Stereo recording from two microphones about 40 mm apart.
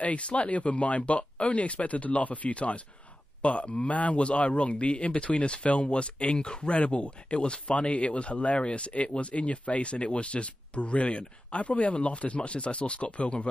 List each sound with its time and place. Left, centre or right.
0.0 s a man's voice: left